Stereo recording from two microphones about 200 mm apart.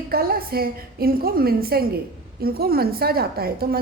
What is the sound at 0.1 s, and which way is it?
A woman's voice, 50° right (ahead or behind).